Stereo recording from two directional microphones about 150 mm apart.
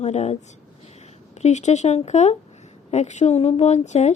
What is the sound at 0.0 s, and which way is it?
Speech, 45° left (ahead or behind).